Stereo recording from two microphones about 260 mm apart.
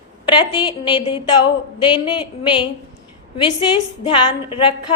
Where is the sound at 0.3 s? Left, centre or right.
Centre.